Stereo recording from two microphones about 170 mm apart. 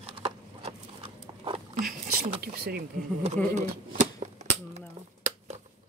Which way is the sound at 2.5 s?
65° right (ahead or behind).